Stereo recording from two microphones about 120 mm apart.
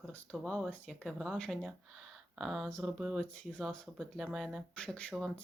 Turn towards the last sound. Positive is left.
turn(degrees=5)  # may be behind; listen again after turning